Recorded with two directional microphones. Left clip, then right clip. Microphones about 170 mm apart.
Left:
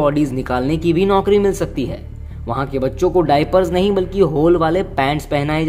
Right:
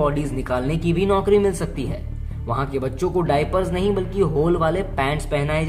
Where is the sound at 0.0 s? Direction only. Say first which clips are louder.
Left 5 dB; 40° left (ahead or behind).